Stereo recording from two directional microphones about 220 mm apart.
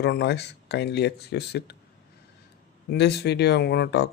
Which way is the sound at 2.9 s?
50° left (ahead or behind).